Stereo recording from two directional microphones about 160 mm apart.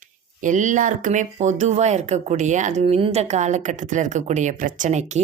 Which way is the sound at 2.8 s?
40° right (ahead or behind).